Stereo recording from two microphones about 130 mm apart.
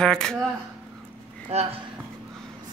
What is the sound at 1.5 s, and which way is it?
Speech, 55° right (ahead or behind).